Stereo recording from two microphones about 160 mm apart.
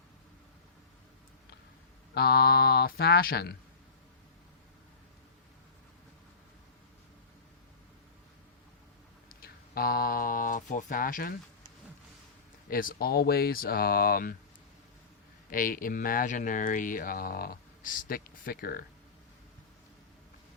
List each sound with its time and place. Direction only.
2.1 s speech: 85° left
9.3 s speech: 70° left (ahead or behind)
12.7 s speech: 65° left (ahead or behind)
15.4 s speech: 60° left (ahead or behind)